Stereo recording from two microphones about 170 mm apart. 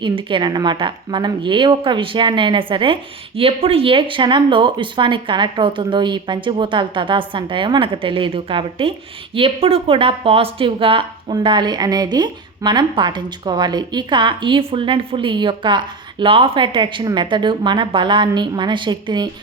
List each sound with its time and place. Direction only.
0.0 s a woman's voice: 30° right (ahead or behind)